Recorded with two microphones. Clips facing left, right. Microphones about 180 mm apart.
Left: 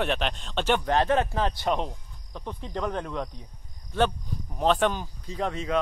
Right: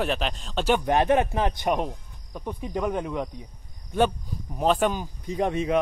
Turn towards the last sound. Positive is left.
turn(degrees=-20)  # may be behind; listen again after turning